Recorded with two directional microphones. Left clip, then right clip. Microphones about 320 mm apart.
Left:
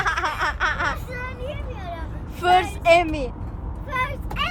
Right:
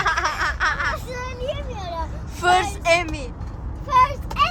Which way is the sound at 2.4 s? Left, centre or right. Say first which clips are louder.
Left 1 dB; centre.